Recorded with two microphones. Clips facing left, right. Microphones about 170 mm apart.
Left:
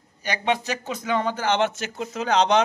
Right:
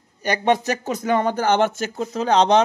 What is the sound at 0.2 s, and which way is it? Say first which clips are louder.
A man's voice: right 5 dB; 45° right (ahead or behind).